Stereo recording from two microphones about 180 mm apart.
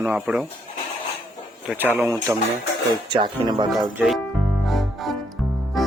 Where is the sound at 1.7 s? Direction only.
10° right (ahead or behind).